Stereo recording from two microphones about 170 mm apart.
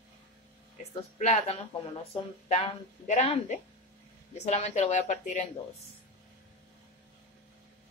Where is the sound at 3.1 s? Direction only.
45° left (ahead or behind).